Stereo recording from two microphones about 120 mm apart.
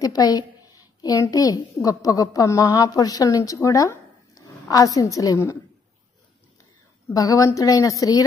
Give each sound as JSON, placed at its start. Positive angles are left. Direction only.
{"t": 0.0, "sound": "a child's voice", "side_deg": 30}
{"t": 7.2, "sound": "a woman's voice", "side_deg": 30}